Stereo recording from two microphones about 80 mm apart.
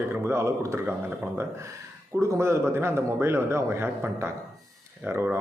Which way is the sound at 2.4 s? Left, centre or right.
Right.